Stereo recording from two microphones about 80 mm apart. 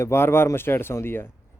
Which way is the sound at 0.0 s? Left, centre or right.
Left.